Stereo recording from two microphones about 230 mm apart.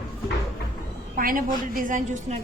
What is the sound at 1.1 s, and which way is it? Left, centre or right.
A woman's voice, right.